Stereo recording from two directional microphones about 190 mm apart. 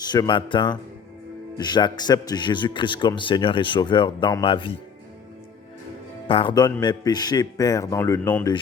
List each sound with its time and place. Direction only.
0.1 s a man's voice: 25° left (ahead or behind)
6.2 s a man's voice: 25° left (ahead or behind)